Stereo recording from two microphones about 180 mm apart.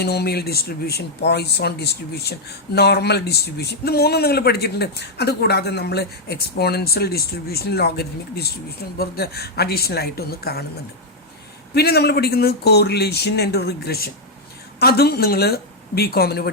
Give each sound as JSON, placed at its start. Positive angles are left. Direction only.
{"t": 0.0, "sound": "speech", "side_deg": 60}
{"t": 11.7, "sound": "speech", "side_deg": 60}